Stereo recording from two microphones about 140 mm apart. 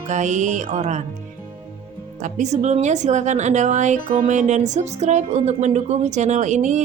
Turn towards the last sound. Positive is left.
turn(degrees=-60)  # may be behind; listen again after turning